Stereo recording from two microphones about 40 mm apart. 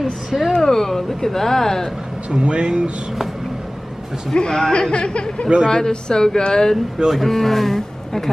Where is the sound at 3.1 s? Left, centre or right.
Centre.